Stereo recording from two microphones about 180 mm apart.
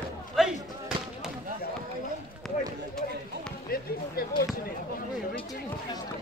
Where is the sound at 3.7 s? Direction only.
55° left (ahead or behind).